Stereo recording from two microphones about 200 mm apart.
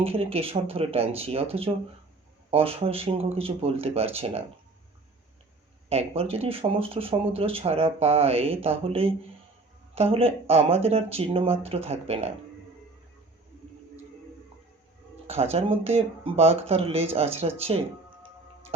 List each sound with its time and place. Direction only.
0.0 s speech: 30° right (ahead or behind)
5.9 s speech: 30° right (ahead or behind)
15.3 s speech: 30° right (ahead or behind)
17.6 s music: 30° right (ahead or behind)